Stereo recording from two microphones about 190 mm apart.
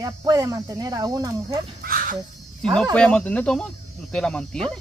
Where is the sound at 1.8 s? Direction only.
50° right (ahead or behind).